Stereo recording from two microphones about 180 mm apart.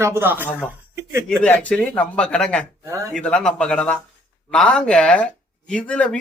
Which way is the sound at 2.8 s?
15° right (ahead or behind).